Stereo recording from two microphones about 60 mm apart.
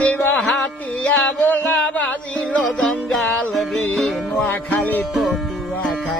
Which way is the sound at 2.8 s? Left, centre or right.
Centre.